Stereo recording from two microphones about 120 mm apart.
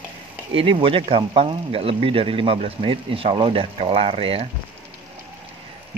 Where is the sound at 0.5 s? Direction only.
50° right (ahead or behind).